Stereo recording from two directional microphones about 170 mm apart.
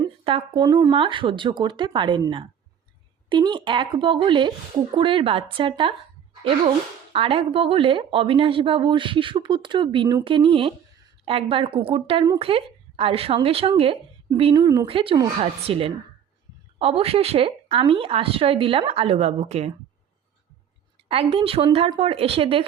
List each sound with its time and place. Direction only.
0.0 s a woman's voice: 30° right (ahead or behind)
7.1 s a woman's voice: 35° right (ahead or behind)
14.6 s speech: 20° right (ahead or behind)
14.8 s a woman's voice: 30° right (ahead or behind)
21.1 s a woman's voice: 35° right (ahead or behind)